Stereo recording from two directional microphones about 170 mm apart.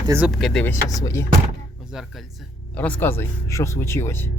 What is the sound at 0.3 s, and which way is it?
Speech, centre (ahead or behind).